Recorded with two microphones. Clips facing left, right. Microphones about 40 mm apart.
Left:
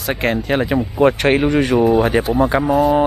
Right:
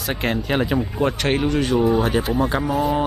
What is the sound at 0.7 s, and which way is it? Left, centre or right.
Speech, centre.